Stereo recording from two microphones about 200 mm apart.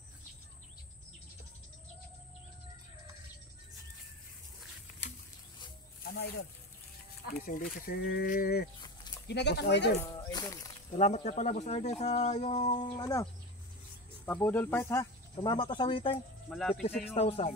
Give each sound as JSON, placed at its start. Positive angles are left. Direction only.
{"t": 6.0, "sound": "speech", "side_deg": 50}
{"t": 9.9, "sound": "speech", "side_deg": 15}
{"t": 11.0, "sound": "speech", "side_deg": 30}
{"t": 14.2, "sound": "speech", "side_deg": 10}
{"t": 15.3, "sound": "speech", "side_deg": 25}
{"t": 16.4, "sound": "speech", "side_deg": 5}
{"t": 16.8, "sound": "speech", "side_deg": 30}